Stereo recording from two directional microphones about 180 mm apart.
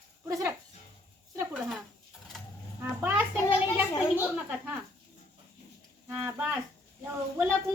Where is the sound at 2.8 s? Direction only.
10° right (ahead or behind).